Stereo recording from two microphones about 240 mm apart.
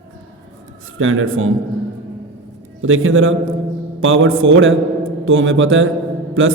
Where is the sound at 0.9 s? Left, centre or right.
Right.